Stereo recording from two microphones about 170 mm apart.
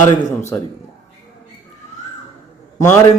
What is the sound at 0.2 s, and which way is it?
Speech, 15° left (ahead or behind).